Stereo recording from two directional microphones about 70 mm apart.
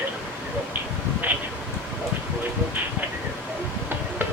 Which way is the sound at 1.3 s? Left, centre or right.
Right.